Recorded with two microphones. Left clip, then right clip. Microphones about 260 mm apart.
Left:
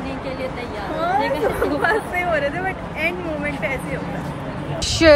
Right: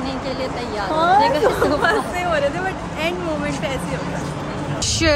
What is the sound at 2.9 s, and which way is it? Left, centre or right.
Speech, centre.